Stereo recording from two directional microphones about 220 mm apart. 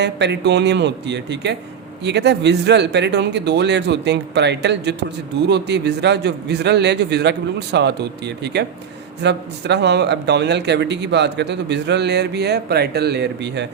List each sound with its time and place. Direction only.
0.0 s speech: 50° right (ahead or behind)